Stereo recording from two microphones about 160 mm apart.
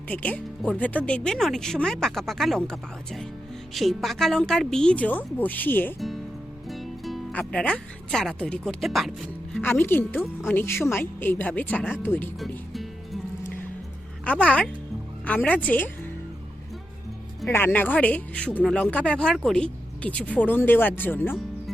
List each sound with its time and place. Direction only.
0.1 s speech: 10° left (ahead or behind)
6.7 s speech: centre (ahead or behind)
9.6 s speech: 15° left (ahead or behind)
12.4 s speech: centre (ahead or behind)
14.4 s speech: 10° left (ahead or behind)
17.5 s speech: 10° left (ahead or behind)